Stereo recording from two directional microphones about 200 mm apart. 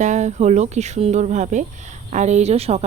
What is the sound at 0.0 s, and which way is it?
Speech, 35° right (ahead or behind).